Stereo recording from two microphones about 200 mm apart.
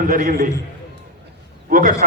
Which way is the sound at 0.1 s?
45° right (ahead or behind).